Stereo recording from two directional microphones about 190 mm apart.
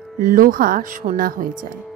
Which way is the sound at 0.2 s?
45° right (ahead or behind).